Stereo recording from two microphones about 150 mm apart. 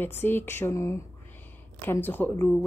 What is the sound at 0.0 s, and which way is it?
A woman's voice, 15° left (ahead or behind).